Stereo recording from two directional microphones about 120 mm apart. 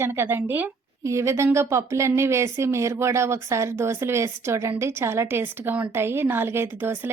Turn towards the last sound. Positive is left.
turn(degrees=-20)  # may be behind; listen again after turning